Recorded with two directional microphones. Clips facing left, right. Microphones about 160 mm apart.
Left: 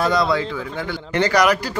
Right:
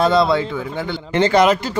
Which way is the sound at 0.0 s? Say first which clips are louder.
Right 4 dB; 25° right (ahead or behind).